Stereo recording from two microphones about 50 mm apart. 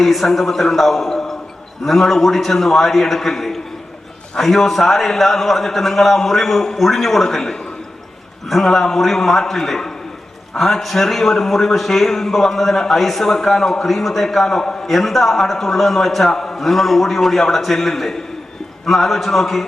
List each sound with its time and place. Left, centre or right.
0.0 s a man's voice: centre